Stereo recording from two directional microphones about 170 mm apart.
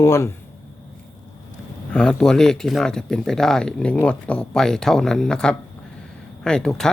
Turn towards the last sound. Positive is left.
turn(degrees=5)  # may be behind; listen again after turning